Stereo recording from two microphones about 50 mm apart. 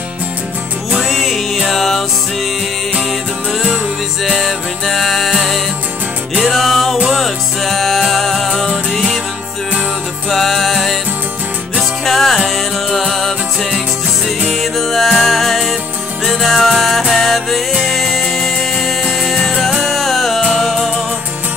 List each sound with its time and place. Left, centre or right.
1.0 s music: centre
4.2 s music: centre
10.3 s music: centre
12.0 s music: centre